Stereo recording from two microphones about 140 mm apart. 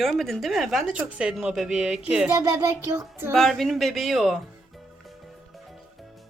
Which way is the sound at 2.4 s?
25° right (ahead or behind).